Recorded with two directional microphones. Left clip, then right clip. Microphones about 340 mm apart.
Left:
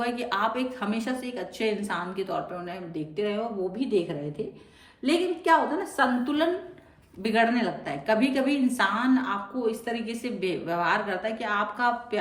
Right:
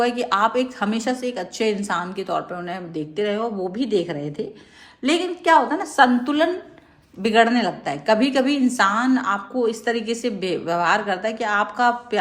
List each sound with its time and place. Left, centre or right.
0.0 s a woman's voice: centre